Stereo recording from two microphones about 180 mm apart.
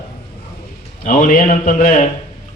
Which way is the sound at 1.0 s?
45° left (ahead or behind).